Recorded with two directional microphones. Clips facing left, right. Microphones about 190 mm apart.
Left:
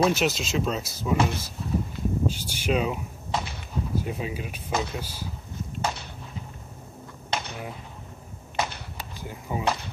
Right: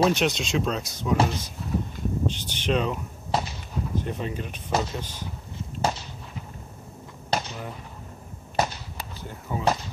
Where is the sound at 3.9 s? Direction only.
5° left (ahead or behind).